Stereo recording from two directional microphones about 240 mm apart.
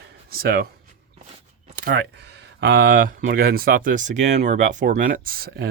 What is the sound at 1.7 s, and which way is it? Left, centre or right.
Speech, right.